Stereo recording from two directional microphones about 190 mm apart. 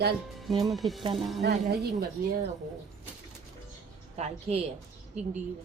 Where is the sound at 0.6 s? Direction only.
Centre (ahead or behind).